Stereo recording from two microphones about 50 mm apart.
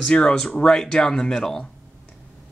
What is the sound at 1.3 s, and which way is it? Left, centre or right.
Speech, centre.